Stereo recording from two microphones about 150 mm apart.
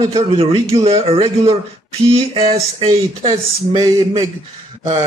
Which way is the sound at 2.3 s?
40° right (ahead or behind).